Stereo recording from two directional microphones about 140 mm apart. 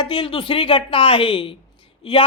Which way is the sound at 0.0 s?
40° left (ahead or behind).